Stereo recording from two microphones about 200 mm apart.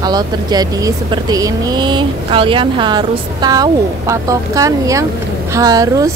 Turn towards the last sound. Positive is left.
turn(degrees=-15)  # may be behind; listen again after turning